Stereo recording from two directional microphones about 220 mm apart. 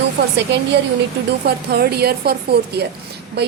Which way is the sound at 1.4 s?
45° right (ahead or behind).